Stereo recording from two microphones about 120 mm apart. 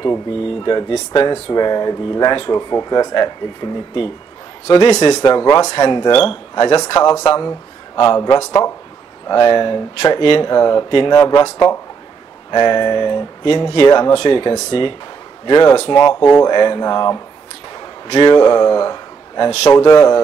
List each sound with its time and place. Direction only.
0.7 s a man's voice: 40° left (ahead or behind)
9.3 s speech: 40° left (ahead or behind); by 11.8 s 25° left (ahead or behind)
12.4 s a man's voice: 40° left (ahead or behind)
16.1 s a man's voice: 25° left (ahead or behind)
16.4 s speech: 40° left (ahead or behind)
17.7 s a sound: 45° left (ahead or behind)
19.7 s speech: 40° left (ahead or behind)